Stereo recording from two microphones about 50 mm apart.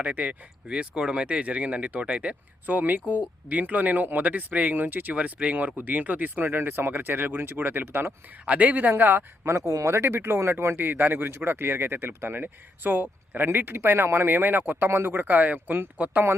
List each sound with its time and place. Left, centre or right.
0.0 s speech: right
0.7 s speech: centre
2.6 s speech: right
5.1 s speech: right
8.4 s speech: right
9.4 s speech: right
14.3 s speech: right